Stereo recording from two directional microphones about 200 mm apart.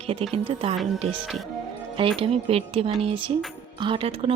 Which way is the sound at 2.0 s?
25° right (ahead or behind).